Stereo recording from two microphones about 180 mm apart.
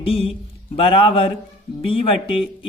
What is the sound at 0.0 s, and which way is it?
Speech, 30° left (ahead or behind).